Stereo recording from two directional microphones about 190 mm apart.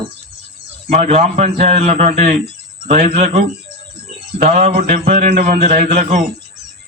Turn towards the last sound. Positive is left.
turn(degrees=-45)  # may be behind; listen again after turning